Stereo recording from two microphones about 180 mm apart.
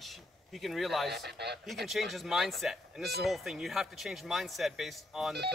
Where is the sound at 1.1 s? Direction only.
65° right (ahead or behind).